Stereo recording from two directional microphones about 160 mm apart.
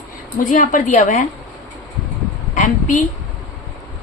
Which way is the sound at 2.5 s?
50° left (ahead or behind).